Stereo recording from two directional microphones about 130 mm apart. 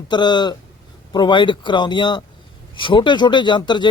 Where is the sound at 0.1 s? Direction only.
35° left (ahead or behind).